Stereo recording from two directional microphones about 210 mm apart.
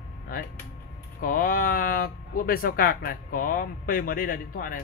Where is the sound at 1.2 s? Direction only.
40° left (ahead or behind).